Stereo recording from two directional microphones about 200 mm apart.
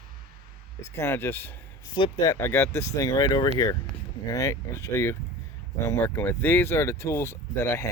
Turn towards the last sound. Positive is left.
turn(degrees=10)  # may be behind; listen again after turning